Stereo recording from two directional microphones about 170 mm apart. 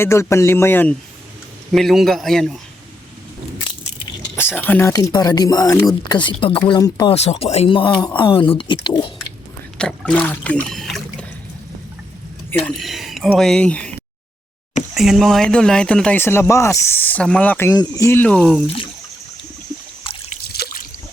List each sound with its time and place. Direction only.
0.0 s speech: 15° left (ahead or behind)
1.7 s speech: centre (ahead or behind)
4.4 s speech: 10° left (ahead or behind)
7.1 s speech: 35° left (ahead or behind)
9.7 s speech: 5° left (ahead or behind)
12.6 s speech: centre (ahead or behind)
14.9 s speech: centre (ahead or behind)
17.7 s speech: 20° left (ahead or behind)
18.3 s speech: centre (ahead or behind)
20.1 s trickle: 30° left (ahead or behind)
20.5 s a sound: 65° left (ahead or behind)